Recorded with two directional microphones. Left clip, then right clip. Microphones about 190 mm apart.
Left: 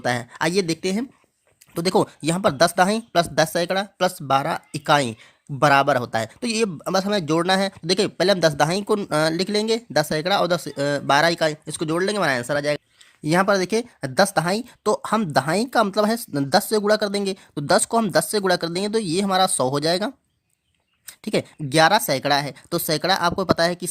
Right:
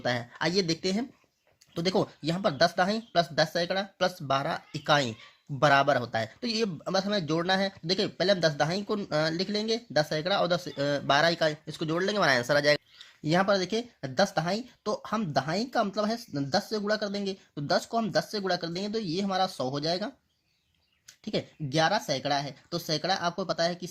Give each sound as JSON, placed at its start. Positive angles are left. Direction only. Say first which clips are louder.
{"t": 0.0, "sound": "speech", "louder": "left 7 dB", "side_deg": 35}
{"t": 13.2, "sound": "speech", "louder": "left 6 dB", "side_deg": 35}